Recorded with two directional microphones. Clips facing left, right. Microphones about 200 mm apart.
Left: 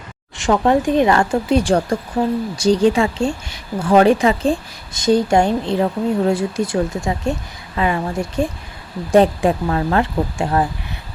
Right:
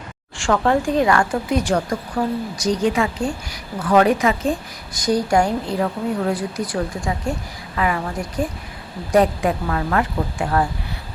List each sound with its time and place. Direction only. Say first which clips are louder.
0.3 s speech: left 3 dB; 20° left (ahead or behind)